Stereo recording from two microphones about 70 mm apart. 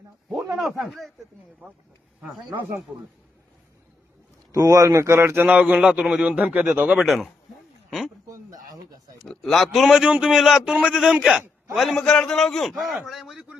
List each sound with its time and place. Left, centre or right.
0.3 s a man's voice: centre
4.5 s speech: right
5.5 s a man's voice: right
8.3 s a sound: right
9.1 s a man's voice: centre
12.0 s speech: centre